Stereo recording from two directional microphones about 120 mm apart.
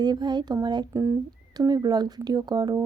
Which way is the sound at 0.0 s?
35° right (ahead or behind).